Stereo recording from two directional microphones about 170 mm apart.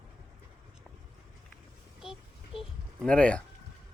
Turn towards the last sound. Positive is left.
turn(degrees=5)  # may be behind; listen again after turning